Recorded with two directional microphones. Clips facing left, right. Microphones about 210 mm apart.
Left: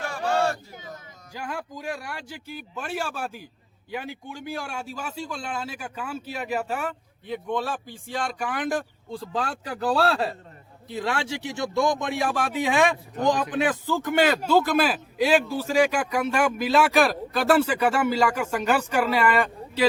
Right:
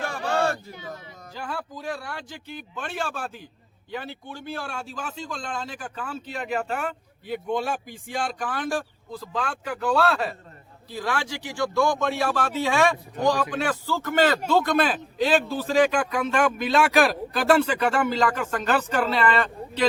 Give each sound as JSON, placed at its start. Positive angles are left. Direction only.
{"t": 0.3, "sound": "a sound", "side_deg": -55}
{"t": 1.3, "sound": "speech", "side_deg": 10}
{"t": 7.3, "sound": "a man's voice", "side_deg": -10}
{"t": 8.4, "sound": "speech", "side_deg": 15}